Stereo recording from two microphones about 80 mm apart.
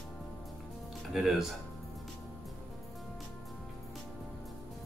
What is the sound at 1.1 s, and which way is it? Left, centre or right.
Speech, centre.